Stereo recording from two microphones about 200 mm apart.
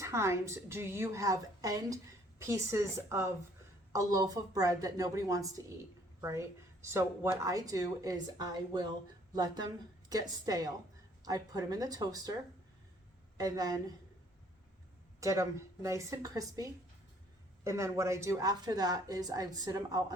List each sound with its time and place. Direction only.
0.0 s a woman's voice: 15° right (ahead or behind)
13.3 s a woman's voice: 20° right (ahead or behind)
15.2 s a woman's voice: 15° right (ahead or behind)